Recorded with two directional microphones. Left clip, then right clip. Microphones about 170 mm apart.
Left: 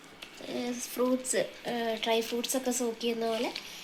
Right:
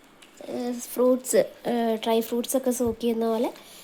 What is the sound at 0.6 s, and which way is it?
Speech, 70° right (ahead or behind).